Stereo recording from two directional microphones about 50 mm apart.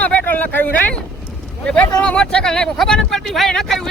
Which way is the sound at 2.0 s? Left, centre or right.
Centre.